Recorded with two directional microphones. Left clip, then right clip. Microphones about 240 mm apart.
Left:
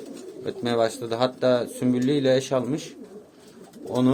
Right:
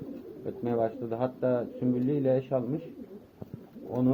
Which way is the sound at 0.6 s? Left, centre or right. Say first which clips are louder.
Left 6 dB; left.